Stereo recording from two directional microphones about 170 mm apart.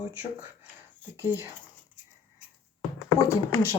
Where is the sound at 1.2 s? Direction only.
10° right (ahead or behind).